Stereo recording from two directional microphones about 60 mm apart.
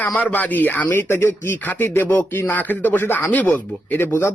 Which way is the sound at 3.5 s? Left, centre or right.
Left.